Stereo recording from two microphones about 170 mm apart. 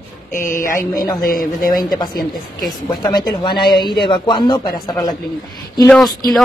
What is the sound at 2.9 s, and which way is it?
Speech, 25° left (ahead or behind).